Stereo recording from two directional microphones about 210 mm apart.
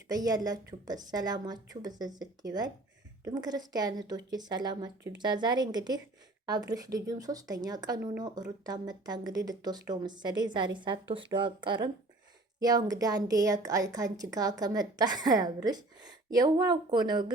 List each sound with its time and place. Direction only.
0.1 s a woman's voice: 20° right (ahead or behind)